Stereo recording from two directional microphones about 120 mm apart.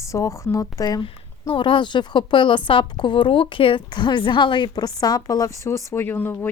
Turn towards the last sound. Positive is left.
turn(degrees=15)  # may be behind; listen again after turning